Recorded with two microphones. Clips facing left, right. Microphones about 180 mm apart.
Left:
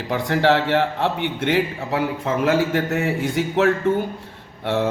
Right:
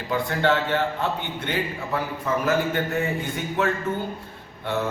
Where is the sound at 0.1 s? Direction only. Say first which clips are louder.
Left 4 dB; 80° left.